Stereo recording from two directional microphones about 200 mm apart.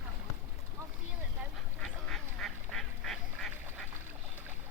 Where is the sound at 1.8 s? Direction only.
Centre (ahead or behind).